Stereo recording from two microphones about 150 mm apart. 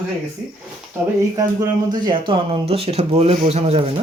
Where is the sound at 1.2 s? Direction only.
25° right (ahead or behind).